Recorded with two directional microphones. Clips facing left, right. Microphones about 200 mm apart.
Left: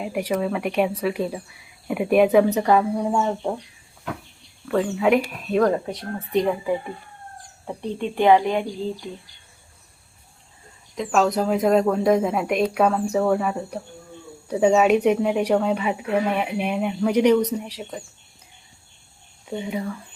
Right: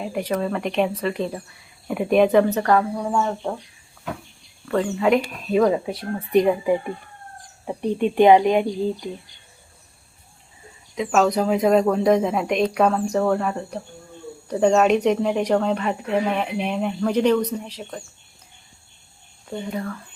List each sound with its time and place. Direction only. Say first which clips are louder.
0.0 s speech: even; 10° left (ahead or behind)
4.7 s a woman's voice: even; 5° left (ahead or behind)
6.3 s speech: right 4 dB; 15° right (ahead or behind)
10.9 s a woman's voice: right 1 dB; centre (ahead or behind)
19.5 s speech: left 1 dB; 10° left (ahead or behind)